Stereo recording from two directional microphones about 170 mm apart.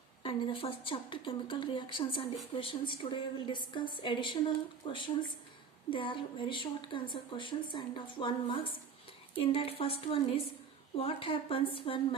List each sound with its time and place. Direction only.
0.2 s a woman's voice: 30° left (ahead or behind)